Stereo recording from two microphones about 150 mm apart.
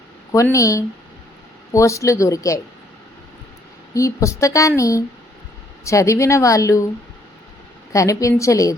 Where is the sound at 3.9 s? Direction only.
20° left (ahead or behind).